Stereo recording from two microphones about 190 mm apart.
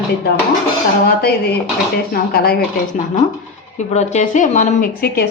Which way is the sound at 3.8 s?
35° left (ahead or behind).